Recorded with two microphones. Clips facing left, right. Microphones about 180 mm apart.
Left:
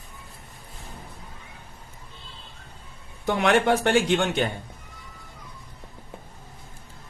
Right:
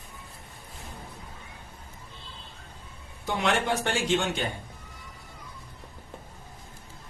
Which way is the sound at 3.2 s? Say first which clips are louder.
Left 6 dB; 65° left (ahead or behind).